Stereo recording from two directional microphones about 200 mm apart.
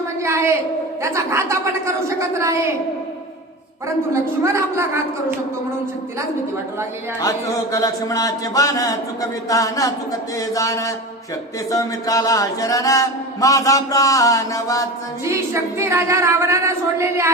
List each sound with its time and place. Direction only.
0.2 s a sound: 15° right (ahead or behind)
1.0 s a woman's voice: 15° right (ahead or behind)
4.1 s a woman's voice: 15° right (ahead or behind)
7.2 s speech: 15° left (ahead or behind)
15.3 s a woman's voice: 15° right (ahead or behind)